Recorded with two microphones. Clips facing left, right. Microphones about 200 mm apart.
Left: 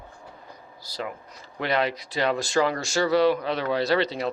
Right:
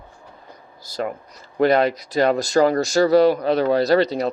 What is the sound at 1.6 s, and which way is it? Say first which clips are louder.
Speech: right 9 dB; 45° right (ahead or behind).